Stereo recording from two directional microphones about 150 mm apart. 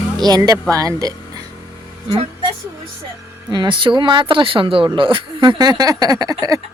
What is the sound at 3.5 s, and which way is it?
Speech, 30° right (ahead or behind).